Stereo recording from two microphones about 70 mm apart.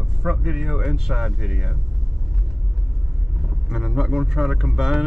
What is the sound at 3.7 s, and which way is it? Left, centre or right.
Speech, centre.